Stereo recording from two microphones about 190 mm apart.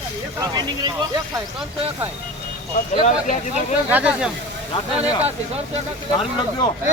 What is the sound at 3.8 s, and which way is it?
Speech, 10° right (ahead or behind).